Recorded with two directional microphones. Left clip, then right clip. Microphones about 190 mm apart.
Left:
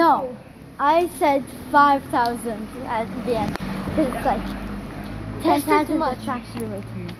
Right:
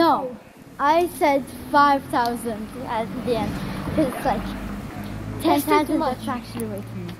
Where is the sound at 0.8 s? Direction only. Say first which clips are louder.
Even; 10° right (ahead or behind).